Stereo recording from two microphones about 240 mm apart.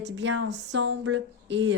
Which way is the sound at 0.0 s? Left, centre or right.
Right.